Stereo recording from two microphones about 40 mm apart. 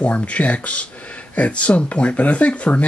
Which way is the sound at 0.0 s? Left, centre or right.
Left.